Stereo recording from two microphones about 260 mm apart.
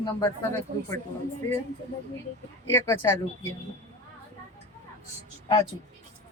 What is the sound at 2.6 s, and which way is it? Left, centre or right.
Speech, centre.